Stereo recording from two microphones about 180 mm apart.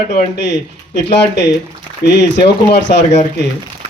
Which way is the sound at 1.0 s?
70° left (ahead or behind).